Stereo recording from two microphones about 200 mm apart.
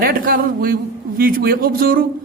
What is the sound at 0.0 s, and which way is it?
A man's voice, 45° right (ahead or behind).